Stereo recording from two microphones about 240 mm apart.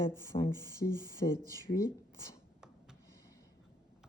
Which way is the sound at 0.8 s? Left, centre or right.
Left.